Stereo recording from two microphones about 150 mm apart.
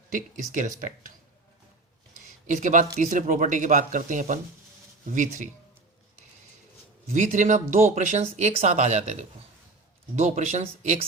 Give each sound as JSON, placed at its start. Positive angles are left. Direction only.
{"t": 0.1, "sound": "speech", "side_deg": -60}
{"t": 2.2, "sound": "speech", "side_deg": -55}
{"t": 7.1, "sound": "speech", "side_deg": -60}
{"t": 10.2, "sound": "speech", "side_deg": -55}